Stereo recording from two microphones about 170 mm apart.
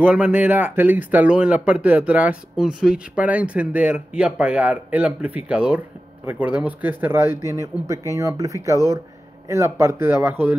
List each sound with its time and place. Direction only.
0.0 s speech: 10° right (ahead or behind)